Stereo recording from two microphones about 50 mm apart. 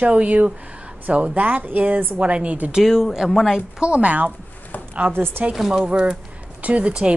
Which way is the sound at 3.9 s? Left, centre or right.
Right.